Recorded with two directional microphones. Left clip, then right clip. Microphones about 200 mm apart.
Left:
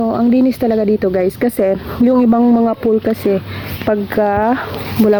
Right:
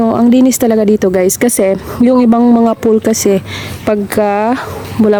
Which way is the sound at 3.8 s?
20° right (ahead or behind).